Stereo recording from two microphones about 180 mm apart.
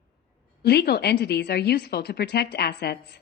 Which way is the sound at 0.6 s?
65° left (ahead or behind).